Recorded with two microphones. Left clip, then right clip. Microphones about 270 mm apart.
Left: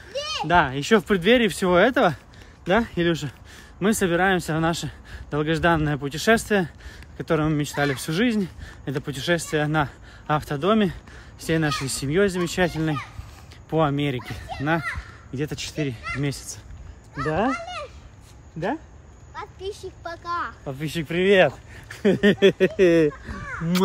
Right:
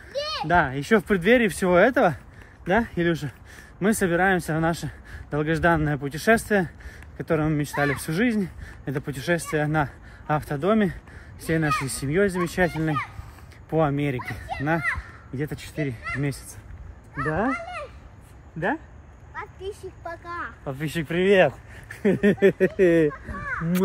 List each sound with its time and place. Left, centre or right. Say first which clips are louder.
0.2 s a sound: even; left
0.5 s speech: left 2 dB; centre
20.2 s speech: left 7 dB; centre
20.6 s speech: even; centre
22.8 s speech: left 1 dB; centre